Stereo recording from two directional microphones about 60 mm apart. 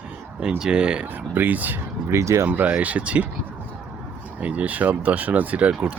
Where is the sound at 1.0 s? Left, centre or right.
Right.